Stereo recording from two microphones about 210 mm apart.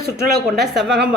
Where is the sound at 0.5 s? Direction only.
Centre (ahead or behind).